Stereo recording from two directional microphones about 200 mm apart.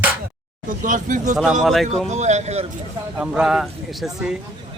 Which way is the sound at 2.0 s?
35° right (ahead or behind).